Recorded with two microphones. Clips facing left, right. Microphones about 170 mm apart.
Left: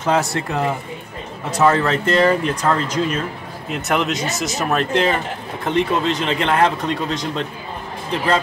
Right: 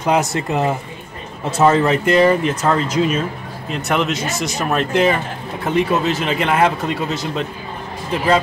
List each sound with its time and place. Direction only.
0.0 s speech: 15° right (ahead or behind)